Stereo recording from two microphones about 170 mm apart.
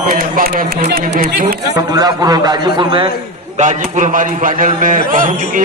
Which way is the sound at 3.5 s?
45° right (ahead or behind).